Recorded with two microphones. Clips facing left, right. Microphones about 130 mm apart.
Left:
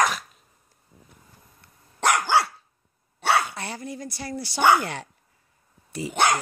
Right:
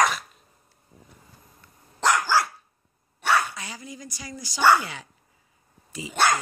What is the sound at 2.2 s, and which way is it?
Dog, 20° left (ahead or behind).